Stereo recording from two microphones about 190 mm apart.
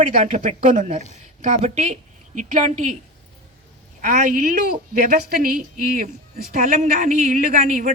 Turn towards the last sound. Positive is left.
turn(degrees=-40)  # may be behind; listen again after turning